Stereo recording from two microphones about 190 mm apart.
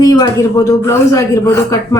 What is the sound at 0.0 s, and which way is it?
A man's voice, 20° left (ahead or behind).